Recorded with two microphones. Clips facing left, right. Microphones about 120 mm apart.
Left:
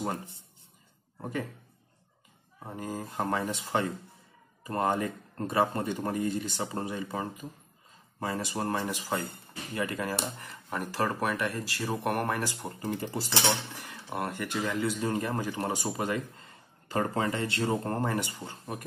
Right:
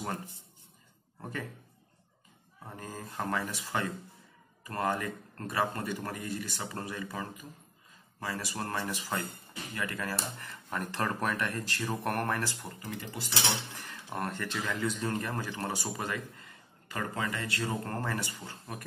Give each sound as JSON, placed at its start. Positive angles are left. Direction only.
{"t": 1.2, "sound": "speech", "side_deg": 15}
{"t": 2.6, "sound": "speech", "side_deg": 15}
{"t": 12.6, "sound": "speech", "side_deg": 30}
{"t": 13.7, "sound": "speech", "side_deg": 15}